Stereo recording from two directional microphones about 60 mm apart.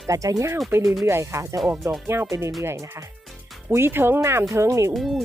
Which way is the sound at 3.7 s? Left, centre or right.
Right.